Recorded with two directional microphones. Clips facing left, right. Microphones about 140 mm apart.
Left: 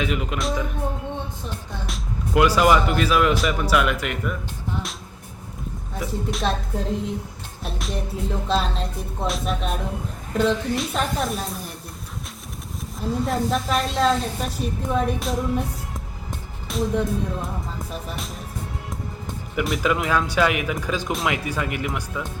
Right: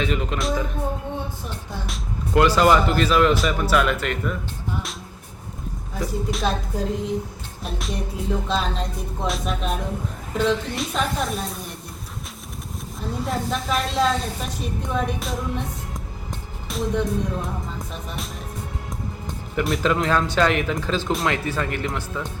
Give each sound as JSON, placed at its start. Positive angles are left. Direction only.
{"t": 0.0, "sound": "a woman's voice", "side_deg": 10}
{"t": 1.9, "sound": "speech", "side_deg": 10}
{"t": 6.0, "sound": "a woman's voice", "side_deg": 0}
{"t": 13.0, "sound": "a woman's voice", "side_deg": 0}
{"t": 16.6, "sound": "a woman's voice", "side_deg": 0}
{"t": 19.5, "sound": "speech", "side_deg": 5}
{"t": 21.1, "sound": "a woman's voice", "side_deg": 0}
{"t": 21.3, "sound": "speech", "side_deg": 15}